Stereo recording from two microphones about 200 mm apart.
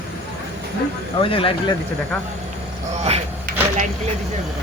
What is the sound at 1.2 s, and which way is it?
Speech, 25° left (ahead or behind).